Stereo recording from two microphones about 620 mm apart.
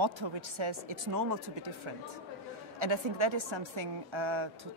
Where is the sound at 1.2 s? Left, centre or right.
Right.